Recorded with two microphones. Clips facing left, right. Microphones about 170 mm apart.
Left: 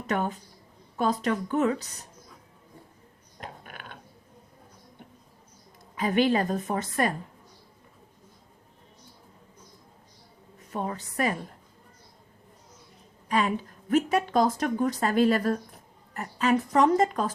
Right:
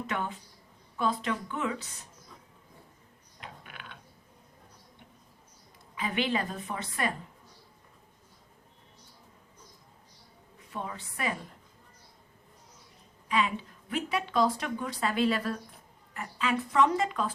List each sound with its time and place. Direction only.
0.1 s speech: 40° left (ahead or behind)
3.4 s mechanisms: 45° left (ahead or behind)
5.9 s a woman's voice: 45° left (ahead or behind)
10.6 s a woman's voice: 45° left (ahead or behind)
13.2 s a woman's voice: 45° left (ahead or behind)